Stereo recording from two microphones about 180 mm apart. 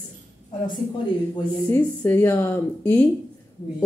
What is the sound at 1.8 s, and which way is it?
Speech, 10° left (ahead or behind).